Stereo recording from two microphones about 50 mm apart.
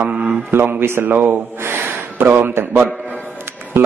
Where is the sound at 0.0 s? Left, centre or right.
Right.